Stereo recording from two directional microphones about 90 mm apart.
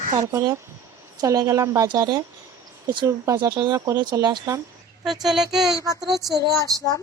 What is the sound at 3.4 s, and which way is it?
Speech, 35° right (ahead or behind).